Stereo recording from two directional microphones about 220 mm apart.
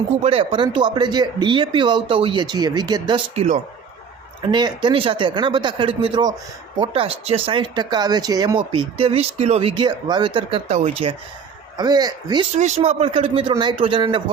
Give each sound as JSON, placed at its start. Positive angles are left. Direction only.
{"t": 0.2, "sound": "speech", "side_deg": -25}
{"t": 12.5, "sound": "speech", "side_deg": -30}